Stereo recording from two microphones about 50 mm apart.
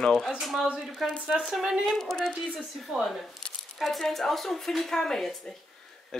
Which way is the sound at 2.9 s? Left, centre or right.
Centre.